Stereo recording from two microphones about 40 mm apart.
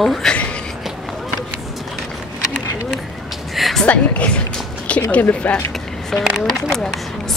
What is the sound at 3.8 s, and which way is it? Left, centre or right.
A woman's voice, left.